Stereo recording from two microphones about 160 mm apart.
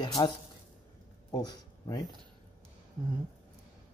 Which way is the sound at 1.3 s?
25° left (ahead or behind).